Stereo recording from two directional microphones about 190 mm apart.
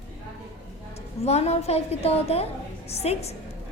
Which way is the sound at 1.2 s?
35° left (ahead or behind).